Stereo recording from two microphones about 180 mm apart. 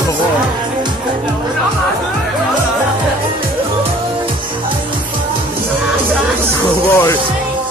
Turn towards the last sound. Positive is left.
turn(degrees=15)  # may be behind; listen again after turning